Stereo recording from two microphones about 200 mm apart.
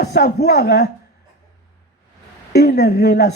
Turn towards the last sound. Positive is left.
turn(degrees=55)  # may be behind; listen again after turning